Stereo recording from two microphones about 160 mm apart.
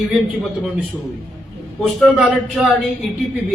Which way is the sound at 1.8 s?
Centre (ahead or behind).